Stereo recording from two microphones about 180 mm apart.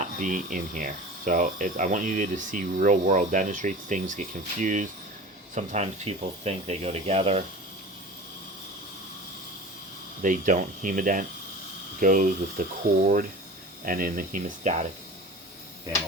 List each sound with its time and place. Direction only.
0.2 s speech: 45° right (ahead or behind)
10.2 s speech: 45° right (ahead or behind)
13.8 s speech: 50° right (ahead or behind)